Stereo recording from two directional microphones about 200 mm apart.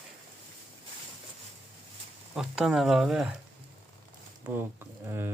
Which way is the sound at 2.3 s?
Centre (ahead or behind).